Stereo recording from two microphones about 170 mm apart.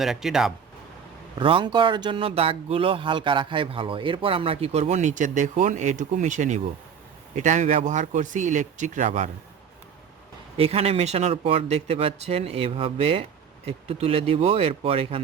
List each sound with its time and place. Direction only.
0.0 s speech: centre (ahead or behind)
1.4 s speech: 30° right (ahead or behind); by 9.3 s 45° right (ahead or behind)
10.6 s speech: 35° right (ahead or behind)